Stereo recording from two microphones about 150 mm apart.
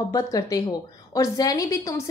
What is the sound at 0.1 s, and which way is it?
A woman's voice, 25° left (ahead or behind).